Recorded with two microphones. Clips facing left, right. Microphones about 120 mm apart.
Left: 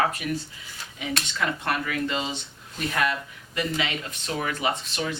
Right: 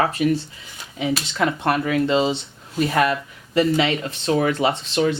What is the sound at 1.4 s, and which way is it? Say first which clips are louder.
Speech: right 7 dB; 30° right (ahead or behind).